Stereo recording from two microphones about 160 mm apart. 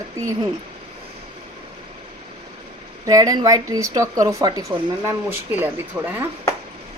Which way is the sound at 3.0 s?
20° right (ahead or behind).